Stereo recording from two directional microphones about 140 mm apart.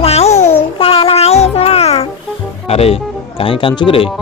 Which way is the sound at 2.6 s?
45° left (ahead or behind).